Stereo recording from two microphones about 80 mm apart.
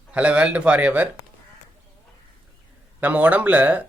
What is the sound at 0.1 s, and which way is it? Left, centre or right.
Speech, centre.